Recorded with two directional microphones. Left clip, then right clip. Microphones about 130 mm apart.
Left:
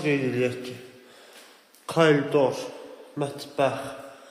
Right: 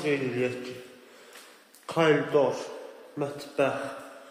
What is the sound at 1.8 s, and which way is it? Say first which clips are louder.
Speech: left 3 dB; 35° left (ahead or behind).